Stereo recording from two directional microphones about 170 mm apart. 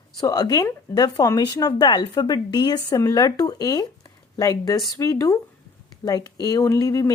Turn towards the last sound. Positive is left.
turn(degrees=20)  # may be behind; listen again after turning